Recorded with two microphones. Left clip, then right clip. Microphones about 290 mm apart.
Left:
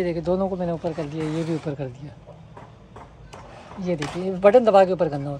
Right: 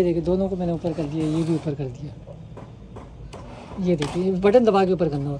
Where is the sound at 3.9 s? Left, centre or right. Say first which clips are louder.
Right 3 dB; left.